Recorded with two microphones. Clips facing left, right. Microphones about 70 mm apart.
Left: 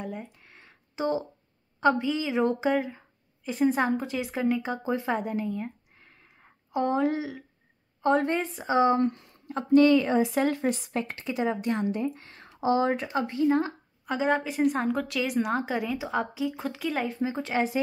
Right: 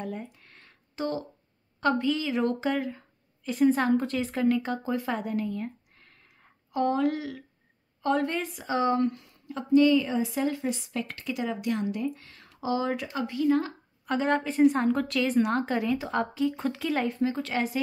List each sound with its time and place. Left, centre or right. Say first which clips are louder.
0.0 s a sound: right 1 dB; centre
1.8 s a woman's voice: left 1 dB; centre
6.2 s a sound: left 2 dB; left
8.0 s a woman's voice: left 3 dB; left
10.9 s a woman's voice: left 2 dB; left
14.0 s a woman's voice: even; centre
17.2 s a woman's voice: even; centre